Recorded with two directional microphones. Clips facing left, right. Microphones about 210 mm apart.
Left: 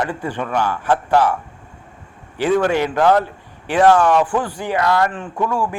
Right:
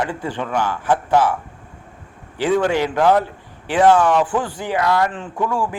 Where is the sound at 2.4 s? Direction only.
15° right (ahead or behind).